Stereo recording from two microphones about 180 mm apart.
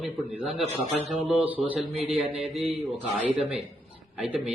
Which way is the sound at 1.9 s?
35° right (ahead or behind).